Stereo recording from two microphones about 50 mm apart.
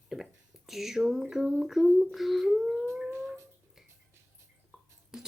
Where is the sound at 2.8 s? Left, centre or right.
Right.